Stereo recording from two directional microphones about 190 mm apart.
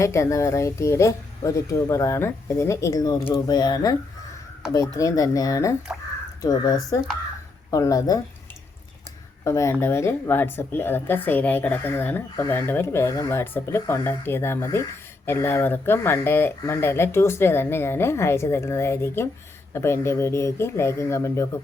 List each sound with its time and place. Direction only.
0.0 s a woman's voice: 15° left (ahead or behind)
9.4 s a woman's voice: 15° left (ahead or behind)